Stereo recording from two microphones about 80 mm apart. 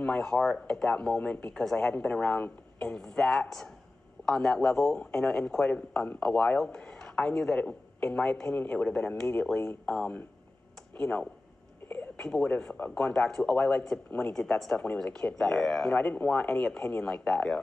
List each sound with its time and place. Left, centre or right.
0.0 s speech: centre